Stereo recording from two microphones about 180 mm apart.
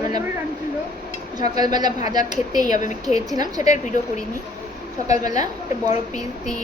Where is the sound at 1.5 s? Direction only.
20° right (ahead or behind).